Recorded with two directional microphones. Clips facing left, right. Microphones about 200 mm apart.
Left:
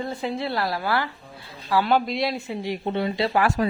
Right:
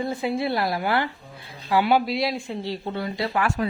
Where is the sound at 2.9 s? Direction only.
25° left (ahead or behind).